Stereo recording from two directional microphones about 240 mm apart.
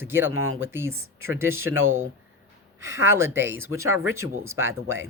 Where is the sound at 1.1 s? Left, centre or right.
Right.